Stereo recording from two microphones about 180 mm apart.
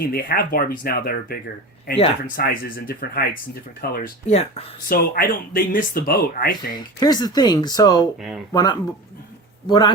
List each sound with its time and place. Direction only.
0.0 s speech: 55° left (ahead or behind)
4.3 s speech: 35° left (ahead or behind)
4.9 s speech: 55° left (ahead or behind)
6.6 s speech: 25° left (ahead or behind)